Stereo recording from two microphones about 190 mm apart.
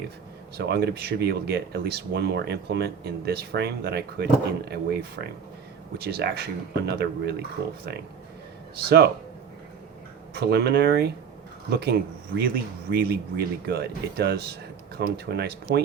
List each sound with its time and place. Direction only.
0.5 s speech: 60° right (ahead or behind)
10.3 s speech: 60° right (ahead or behind)